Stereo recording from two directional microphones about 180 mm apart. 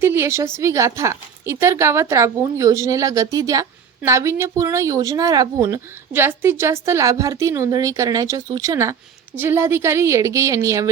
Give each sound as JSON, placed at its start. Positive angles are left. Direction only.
{"t": 0.0, "sound": "speech", "side_deg": -15}